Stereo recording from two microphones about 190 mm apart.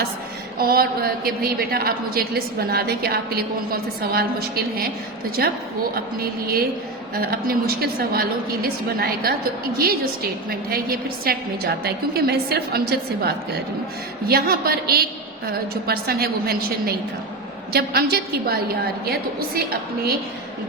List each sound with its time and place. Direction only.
0.6 s a woman's voice: 50° right (ahead or behind)
10.7 s a woman's voice: 50° right (ahead or behind)